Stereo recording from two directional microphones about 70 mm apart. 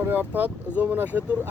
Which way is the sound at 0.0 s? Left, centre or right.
Right.